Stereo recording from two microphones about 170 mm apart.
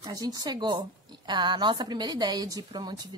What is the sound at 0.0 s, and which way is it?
A woman's voice, 20° right (ahead or behind).